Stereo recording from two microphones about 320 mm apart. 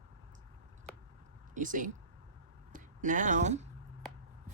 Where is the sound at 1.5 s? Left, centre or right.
Right.